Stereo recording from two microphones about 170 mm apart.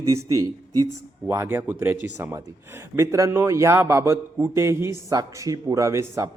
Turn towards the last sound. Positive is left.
turn(degrees=-15)  # may be behind; listen again after turning